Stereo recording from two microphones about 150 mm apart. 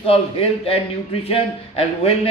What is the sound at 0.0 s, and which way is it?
Speech, 40° left (ahead or behind).